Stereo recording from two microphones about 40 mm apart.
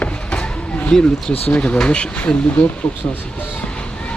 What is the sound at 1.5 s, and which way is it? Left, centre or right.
Speech, left.